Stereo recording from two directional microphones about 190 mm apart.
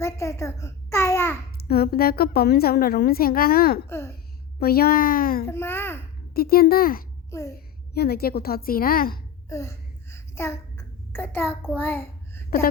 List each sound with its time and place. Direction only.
0.0 s a child's voice: 15° left (ahead or behind)
1.5 s a woman's voice: 55° left (ahead or behind)
3.8 s a child's voice: 15° left (ahead or behind)
4.6 s a woman's voice: 55° left (ahead or behind)
5.5 s a child's voice: 10° left (ahead or behind)
6.3 s a woman's voice: 55° left (ahead or behind)
7.3 s a child's voice: 15° left (ahead or behind)
7.9 s a woman's voice: 55° left (ahead or behind)
9.5 s a sound: 15° left (ahead or behind)
11.7 s a child's voice: 10° left (ahead or behind)